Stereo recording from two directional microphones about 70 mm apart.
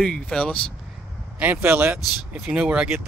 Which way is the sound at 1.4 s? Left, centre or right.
Right.